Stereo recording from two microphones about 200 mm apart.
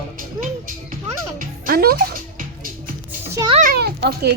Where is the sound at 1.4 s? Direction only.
45° right (ahead or behind).